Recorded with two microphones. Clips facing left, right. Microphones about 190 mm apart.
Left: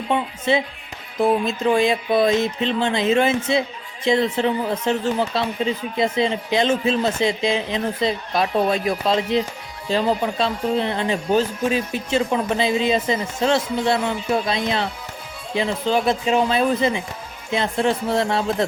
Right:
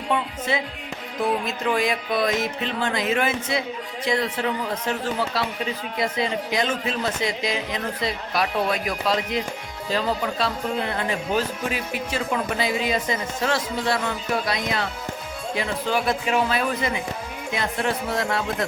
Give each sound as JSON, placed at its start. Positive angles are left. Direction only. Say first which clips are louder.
{"t": 0.1, "sound": "a man's voice", "louder": "left 4 dB", "side_deg": 25}